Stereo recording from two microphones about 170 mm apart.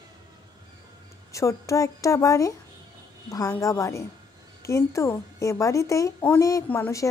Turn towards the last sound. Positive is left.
turn(degrees=15)  # may be behind; listen again after turning